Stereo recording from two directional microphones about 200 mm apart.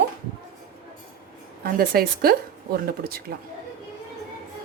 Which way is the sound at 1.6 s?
50° right (ahead or behind).